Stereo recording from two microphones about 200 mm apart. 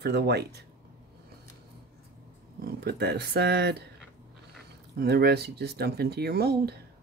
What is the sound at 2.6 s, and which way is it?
Speech, 50° right (ahead or behind).